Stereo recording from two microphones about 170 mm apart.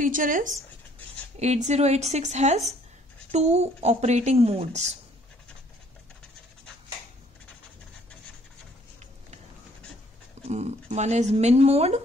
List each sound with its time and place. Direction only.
0.0 s speech: 50° right (ahead or behind)
10.4 s speech: 40° right (ahead or behind)